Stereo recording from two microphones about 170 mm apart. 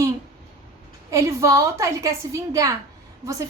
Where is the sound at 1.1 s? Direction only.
15° right (ahead or behind).